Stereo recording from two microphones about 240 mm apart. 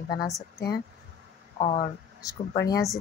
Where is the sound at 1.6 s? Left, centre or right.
Centre.